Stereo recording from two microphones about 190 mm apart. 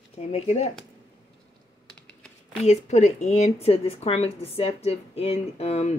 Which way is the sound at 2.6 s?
35° left (ahead or behind).